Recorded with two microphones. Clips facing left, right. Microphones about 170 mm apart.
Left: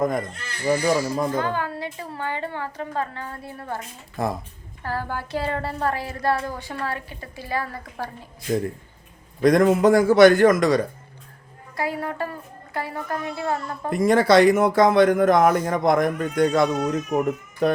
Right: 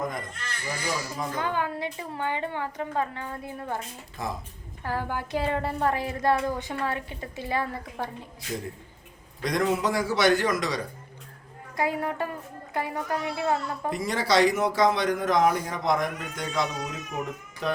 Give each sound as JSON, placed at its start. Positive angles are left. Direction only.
{"t": 0.0, "sound": "a man's voice", "side_deg": 50}
{"t": 1.4, "sound": "a woman's voice", "side_deg": -15}
{"t": 4.2, "sound": "speech", "side_deg": 55}
{"t": 4.8, "sound": "a woman's voice", "side_deg": -15}
{"t": 9.4, "sound": "a man's voice", "side_deg": 50}
{"t": 11.8, "sound": "a woman's voice", "side_deg": -20}
{"t": 13.9, "sound": "a man's voice", "side_deg": 55}